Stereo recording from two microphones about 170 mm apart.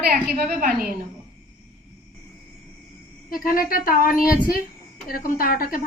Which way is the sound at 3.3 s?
55° left (ahead or behind).